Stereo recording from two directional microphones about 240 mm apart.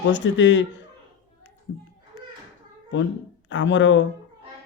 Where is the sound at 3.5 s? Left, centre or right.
Left.